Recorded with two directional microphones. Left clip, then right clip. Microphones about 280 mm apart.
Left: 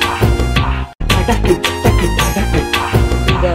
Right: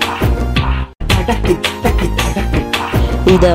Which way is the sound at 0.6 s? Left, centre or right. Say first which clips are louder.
Left 1 dB; centre.